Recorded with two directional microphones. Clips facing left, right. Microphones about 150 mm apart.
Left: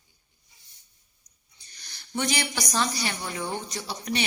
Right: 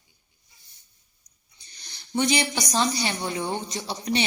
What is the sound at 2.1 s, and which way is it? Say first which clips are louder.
A woman's voice: right 5 dB; 20° right (ahead or behind).